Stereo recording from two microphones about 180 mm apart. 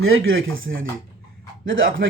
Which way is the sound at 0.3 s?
90° right.